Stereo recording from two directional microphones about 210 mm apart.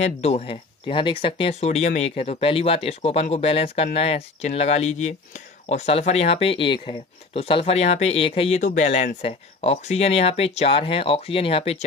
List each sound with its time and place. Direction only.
0.0 s speech: 30° left (ahead or behind)